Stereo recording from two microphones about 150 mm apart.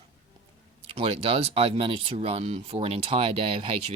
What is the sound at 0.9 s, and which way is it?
Speech, 40° right (ahead or behind).